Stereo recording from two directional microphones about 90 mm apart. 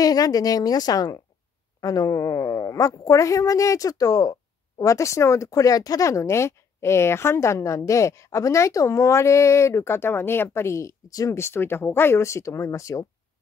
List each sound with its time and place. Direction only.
0.0 s a woman's voice: 45° left (ahead or behind)
11.3 s a woman's voice: 25° left (ahead or behind)